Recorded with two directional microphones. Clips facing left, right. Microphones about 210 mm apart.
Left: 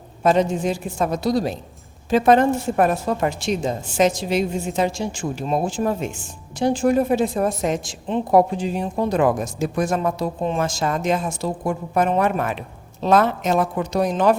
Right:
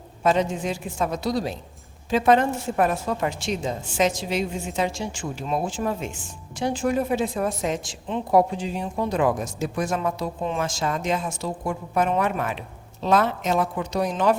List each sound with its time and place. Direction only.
0.2 s a woman's voice: 40° left (ahead or behind)